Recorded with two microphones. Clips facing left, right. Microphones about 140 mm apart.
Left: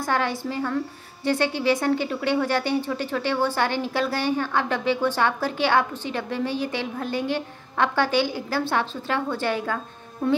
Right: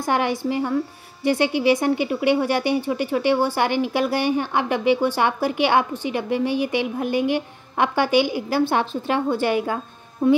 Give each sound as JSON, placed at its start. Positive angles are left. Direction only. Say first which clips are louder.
{"t": 0.0, "sound": "a woman's voice", "louder": "right 3 dB", "side_deg": -15}